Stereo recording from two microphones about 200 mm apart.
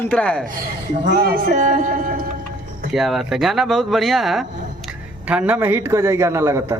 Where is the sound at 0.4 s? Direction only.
45° right (ahead or behind).